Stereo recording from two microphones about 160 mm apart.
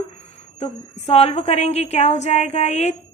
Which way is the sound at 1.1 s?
40° left (ahead or behind).